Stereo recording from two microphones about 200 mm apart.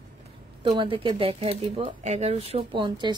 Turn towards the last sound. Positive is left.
turn(degrees=-25)  # may be behind; listen again after turning